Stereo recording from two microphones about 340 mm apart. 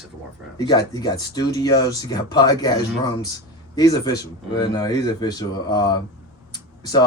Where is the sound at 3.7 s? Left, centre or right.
Centre.